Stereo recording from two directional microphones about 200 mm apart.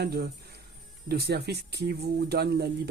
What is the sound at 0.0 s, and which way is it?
Speech, 50° right (ahead or behind).